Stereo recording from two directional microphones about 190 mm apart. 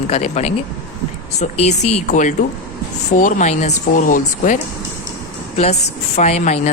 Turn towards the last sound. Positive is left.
turn(degrees=35)  # may be behind; listen again after turning